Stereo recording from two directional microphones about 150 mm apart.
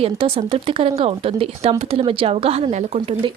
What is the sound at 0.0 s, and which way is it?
Speech, 40° right (ahead or behind).